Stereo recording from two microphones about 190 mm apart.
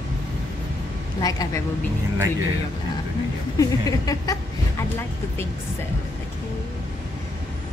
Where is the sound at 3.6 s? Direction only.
20° left (ahead or behind).